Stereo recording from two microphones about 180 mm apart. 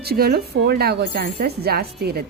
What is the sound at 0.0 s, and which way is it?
A woman's voice, 60° right (ahead or behind).